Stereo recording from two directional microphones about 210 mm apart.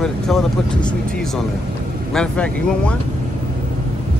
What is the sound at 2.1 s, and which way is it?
Speech, 5° left (ahead or behind).